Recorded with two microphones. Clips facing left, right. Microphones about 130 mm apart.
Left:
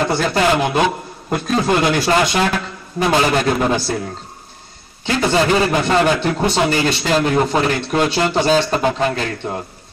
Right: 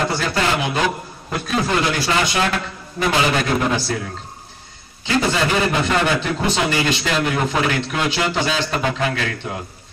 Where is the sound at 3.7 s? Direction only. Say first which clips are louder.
Left 3 dB; 35° left (ahead or behind).